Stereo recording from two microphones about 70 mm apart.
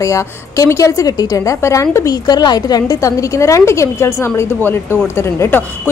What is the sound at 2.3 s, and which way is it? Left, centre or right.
A woman's voice, left.